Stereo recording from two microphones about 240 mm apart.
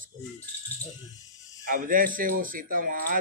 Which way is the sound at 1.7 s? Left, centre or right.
Right.